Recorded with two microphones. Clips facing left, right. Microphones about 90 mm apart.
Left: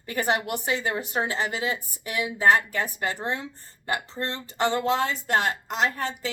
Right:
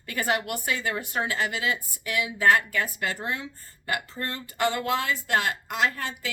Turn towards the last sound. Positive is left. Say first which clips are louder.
# left 1 dB
turn(degrees=30)  # may be behind; listen again after turning